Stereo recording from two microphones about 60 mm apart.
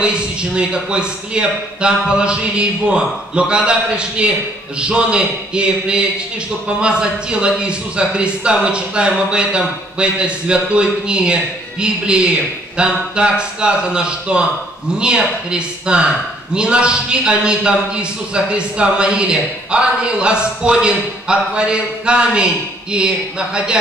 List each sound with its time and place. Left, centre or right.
0.0 s a man's voice: centre